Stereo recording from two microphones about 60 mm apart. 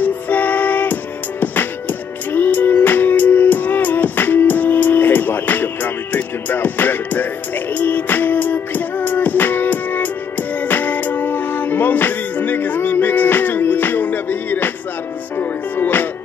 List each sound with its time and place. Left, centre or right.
0.0 s music: left